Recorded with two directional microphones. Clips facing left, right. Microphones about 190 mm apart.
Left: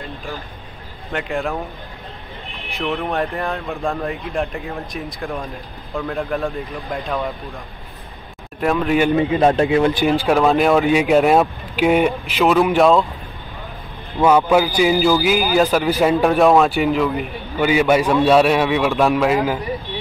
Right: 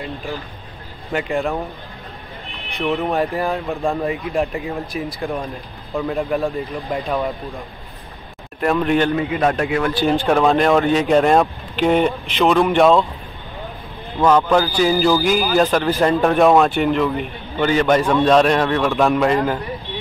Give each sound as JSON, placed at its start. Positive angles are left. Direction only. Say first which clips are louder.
{"t": 1.1, "sound": "speech", "louder": "right 2 dB", "side_deg": 0}
{"t": 2.7, "sound": "speech", "louder": "right 2 dB", "side_deg": 0}
{"t": 8.5, "sound": "speech", "louder": "even", "side_deg": 0}
{"t": 9.1, "sound": "a man's voice", "louder": "left 4 dB", "side_deg": 25}
{"t": 10.0, "sound": "speech", "louder": "even", "side_deg": 5}
{"t": 14.2, "sound": "a man's voice", "louder": "left 1 dB", "side_deg": 10}